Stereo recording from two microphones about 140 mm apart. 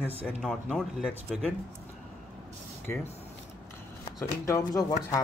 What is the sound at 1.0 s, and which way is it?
Speech, 5° right (ahead or behind).